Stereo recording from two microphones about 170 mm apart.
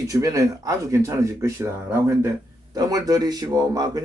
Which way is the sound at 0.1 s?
20° right (ahead or behind).